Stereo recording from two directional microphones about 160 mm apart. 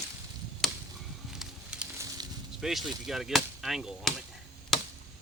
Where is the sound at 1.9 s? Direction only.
20° right (ahead or behind).